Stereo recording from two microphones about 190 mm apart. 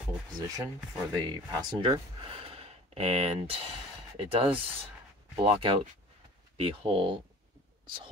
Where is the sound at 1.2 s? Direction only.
25° right (ahead or behind).